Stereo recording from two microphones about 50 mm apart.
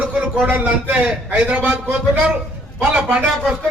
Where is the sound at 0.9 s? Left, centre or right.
Right.